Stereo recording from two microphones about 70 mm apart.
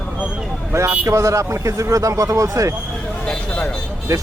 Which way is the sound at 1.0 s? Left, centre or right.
Right.